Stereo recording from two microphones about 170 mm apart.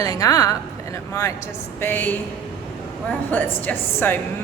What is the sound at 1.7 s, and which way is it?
Speech, 10° left (ahead or behind).